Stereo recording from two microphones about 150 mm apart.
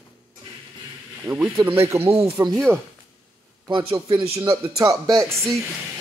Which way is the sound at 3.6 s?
35° right (ahead or behind).